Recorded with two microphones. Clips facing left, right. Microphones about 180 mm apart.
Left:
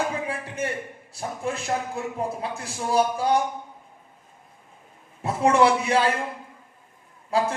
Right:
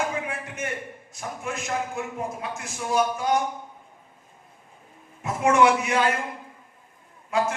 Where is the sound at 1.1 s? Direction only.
35° left (ahead or behind).